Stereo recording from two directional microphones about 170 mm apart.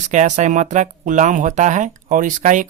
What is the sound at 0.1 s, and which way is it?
Speech, 45° right (ahead or behind).